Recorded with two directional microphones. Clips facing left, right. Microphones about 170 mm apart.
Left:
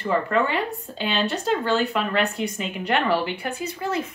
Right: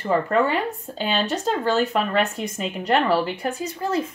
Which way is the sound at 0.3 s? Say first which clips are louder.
Right 2 dB; 40° right (ahead or behind).